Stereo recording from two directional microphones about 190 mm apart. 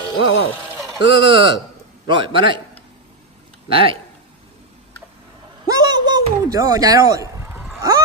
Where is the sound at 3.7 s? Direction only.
30° right (ahead or behind).